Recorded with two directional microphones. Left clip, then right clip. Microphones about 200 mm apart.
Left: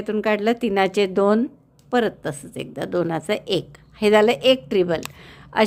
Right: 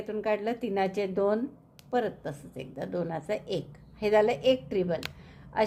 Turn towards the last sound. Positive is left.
turn(degrees=35)  # may be behind; listen again after turning